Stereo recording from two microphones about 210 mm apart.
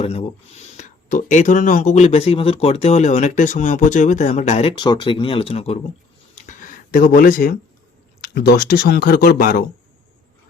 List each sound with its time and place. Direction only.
0.0 s speech: 30° left (ahead or behind)
6.3 s a sound: 35° left (ahead or behind)
8.2 s speech: 50° left (ahead or behind)